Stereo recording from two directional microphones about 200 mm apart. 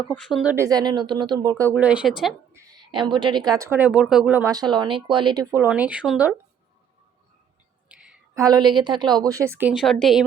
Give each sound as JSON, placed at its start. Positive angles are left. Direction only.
{"t": 0.3, "sound": "speech", "side_deg": 0}
{"t": 0.5, "sound": "a woman's voice", "side_deg": -15}
{"t": 2.5, "sound": "a woman's voice", "side_deg": -15}
{"t": 5.6, "sound": "a woman's voice", "side_deg": -5}
{"t": 7.9, "sound": "a sound", "side_deg": -5}
{"t": 8.4, "sound": "a woman's voice", "side_deg": -20}